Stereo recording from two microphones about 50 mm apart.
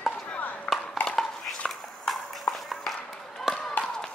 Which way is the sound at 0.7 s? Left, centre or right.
Left.